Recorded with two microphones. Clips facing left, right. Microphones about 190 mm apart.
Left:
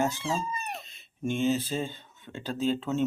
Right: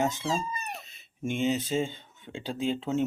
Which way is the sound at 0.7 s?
10° right (ahead or behind).